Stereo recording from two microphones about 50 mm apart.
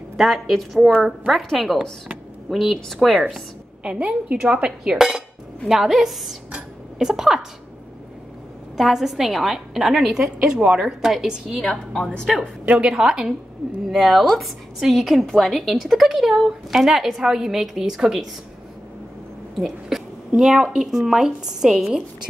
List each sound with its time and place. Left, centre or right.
0.2 s a woman's voice: centre
3.8 s dishes: right
5.7 s a woman's voice: centre
8.7 s a woman's voice: centre
11.7 s a woman's voice: centre
12.6 s a woman's voice: right
12.9 s a woman's voice: centre
13.8 s a woman's voice: centre
19.6 s a woman's voice: centre